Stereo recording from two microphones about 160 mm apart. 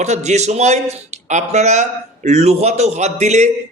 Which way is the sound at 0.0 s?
45° right (ahead or behind).